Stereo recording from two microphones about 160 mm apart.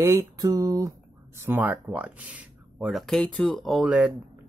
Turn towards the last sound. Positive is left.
turn(degrees=-5)  # may be behind; listen again after turning